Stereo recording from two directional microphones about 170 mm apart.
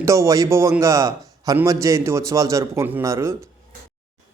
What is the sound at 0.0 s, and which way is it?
A man's voice, 15° right (ahead or behind).